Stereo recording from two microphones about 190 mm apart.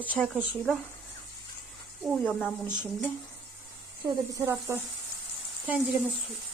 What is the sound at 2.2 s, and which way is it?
Speech, 10° left (ahead or behind).